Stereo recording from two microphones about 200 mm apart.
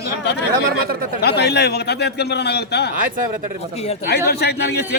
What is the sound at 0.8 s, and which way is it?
Speech, 45° right (ahead or behind).